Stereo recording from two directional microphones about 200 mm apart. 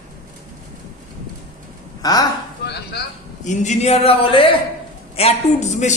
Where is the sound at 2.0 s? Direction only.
20° left (ahead or behind).